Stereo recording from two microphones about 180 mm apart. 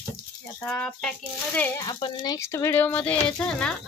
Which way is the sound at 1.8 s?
25° left (ahead or behind).